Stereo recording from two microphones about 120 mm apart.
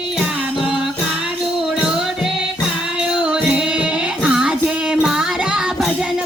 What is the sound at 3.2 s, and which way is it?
Music, 10° right (ahead or behind).